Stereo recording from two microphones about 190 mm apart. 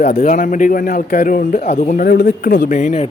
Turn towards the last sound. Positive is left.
turn(degrees=40)  # may be behind; listen again after turning